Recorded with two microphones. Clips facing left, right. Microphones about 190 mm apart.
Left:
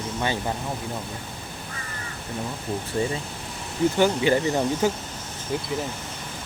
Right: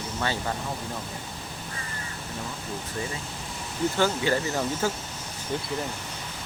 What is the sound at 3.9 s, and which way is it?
Speech, 20° left (ahead or behind).